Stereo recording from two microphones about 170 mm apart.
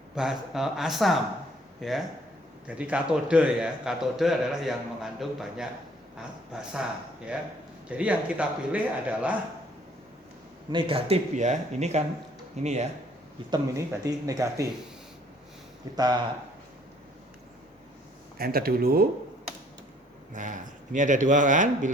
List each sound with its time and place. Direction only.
0.2 s a man's voice: centre (ahead or behind)
7.9 s speech: 5° right (ahead or behind)
10.7 s speech: 30° right (ahead or behind)
13.5 s speech: 20° right (ahead or behind)
16.0 s speech: 25° right (ahead or behind)
18.3 s speech: 60° right (ahead or behind)
20.3 s speech: 50° right (ahead or behind)